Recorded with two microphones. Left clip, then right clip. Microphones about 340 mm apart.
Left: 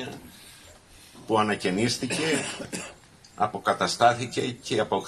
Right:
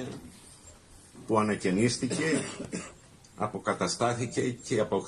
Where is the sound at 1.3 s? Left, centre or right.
Left.